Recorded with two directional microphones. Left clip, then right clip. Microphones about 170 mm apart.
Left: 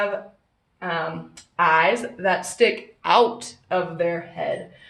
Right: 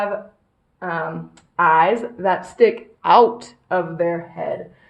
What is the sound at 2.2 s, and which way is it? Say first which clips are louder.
Speech: right 3 dB; 30° right (ahead or behind).